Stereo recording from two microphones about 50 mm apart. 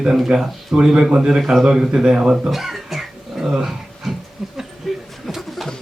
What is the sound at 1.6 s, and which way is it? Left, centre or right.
Speech, centre.